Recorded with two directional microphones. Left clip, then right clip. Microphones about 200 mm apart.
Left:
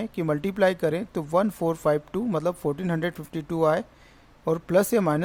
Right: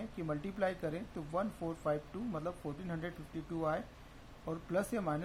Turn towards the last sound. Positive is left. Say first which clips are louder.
# left 15 dB
turn(degrees=55)  # may be behind; listen again after turning